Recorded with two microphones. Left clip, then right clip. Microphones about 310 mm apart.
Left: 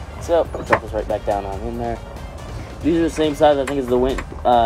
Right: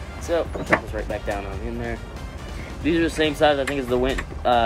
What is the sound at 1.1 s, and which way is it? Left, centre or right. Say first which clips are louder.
Speech: left 7 dB; centre.